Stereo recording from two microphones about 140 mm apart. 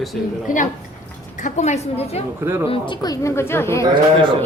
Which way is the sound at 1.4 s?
55° left (ahead or behind).